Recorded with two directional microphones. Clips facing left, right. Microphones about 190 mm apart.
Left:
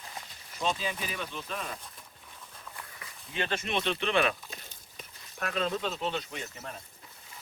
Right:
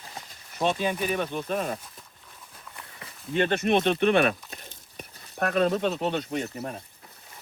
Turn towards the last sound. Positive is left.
turn(degrees=-45)  # may be behind; listen again after turning